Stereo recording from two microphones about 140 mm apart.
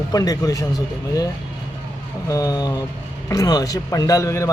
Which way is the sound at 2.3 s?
25° left (ahead or behind).